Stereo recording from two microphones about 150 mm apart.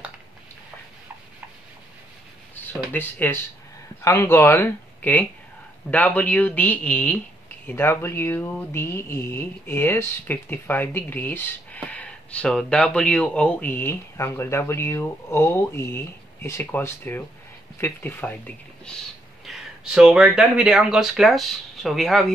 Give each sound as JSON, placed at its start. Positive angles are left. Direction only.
{"t": 2.5, "sound": "speech", "side_deg": 10}
{"t": 19.4, "sound": "speech", "side_deg": -5}